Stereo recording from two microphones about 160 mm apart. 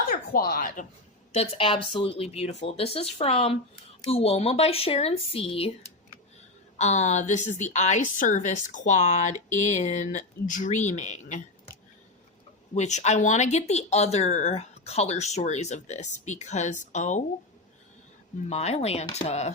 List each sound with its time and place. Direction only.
0.1 s speech: 65° left (ahead or behind)
1.3 s speech: 40° left (ahead or behind)
6.7 s a woman's voice: 45° left (ahead or behind)
12.7 s a woman's voice: 45° left (ahead or behind)
18.4 s a woman's voice: 40° left (ahead or behind)